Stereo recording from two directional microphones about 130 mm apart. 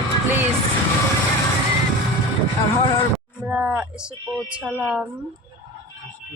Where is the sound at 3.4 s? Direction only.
15° right (ahead or behind).